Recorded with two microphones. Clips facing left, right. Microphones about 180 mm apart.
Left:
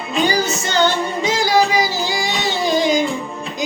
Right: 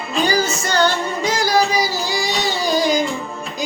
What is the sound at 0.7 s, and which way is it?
Music, 20° left (ahead or behind).